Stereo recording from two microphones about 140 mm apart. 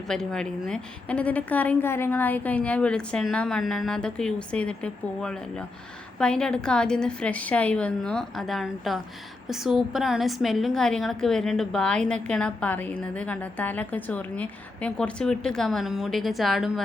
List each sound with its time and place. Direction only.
0.1 s a woman's voice: 5° left (ahead or behind)